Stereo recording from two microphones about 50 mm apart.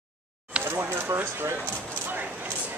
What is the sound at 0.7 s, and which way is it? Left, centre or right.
Speech, right.